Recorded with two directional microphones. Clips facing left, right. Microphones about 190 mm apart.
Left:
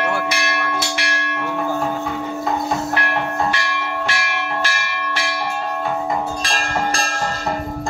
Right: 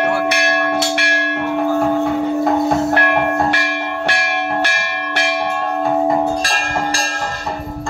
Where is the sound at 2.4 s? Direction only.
55° right (ahead or behind).